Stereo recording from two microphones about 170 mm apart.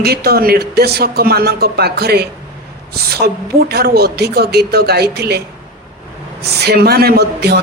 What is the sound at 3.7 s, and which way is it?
A man's voice, 70° right (ahead or behind).